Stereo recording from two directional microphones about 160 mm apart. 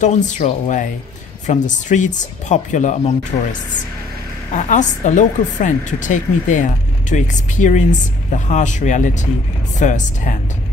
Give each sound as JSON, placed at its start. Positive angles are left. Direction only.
{"t": 0.0, "sound": "speech", "side_deg": 50}
{"t": 3.3, "sound": "speech", "side_deg": 35}
{"t": 4.6, "sound": "speech", "side_deg": 50}